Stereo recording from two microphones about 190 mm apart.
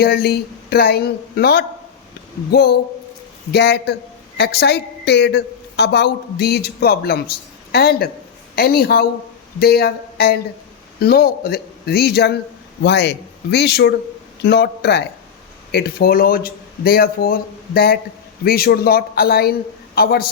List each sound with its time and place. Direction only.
0.0 s a woman's voice: 55° left (ahead or behind)